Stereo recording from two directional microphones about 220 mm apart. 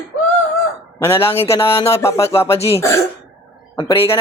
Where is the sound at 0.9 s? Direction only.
10° left (ahead or behind).